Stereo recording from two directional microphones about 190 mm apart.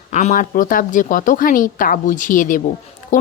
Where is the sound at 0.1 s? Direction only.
40° left (ahead or behind).